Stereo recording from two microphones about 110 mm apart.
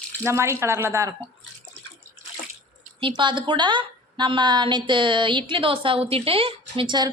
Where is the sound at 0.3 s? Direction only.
25° right (ahead or behind).